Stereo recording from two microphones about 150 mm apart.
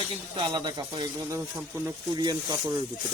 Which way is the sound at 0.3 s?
30° right (ahead or behind).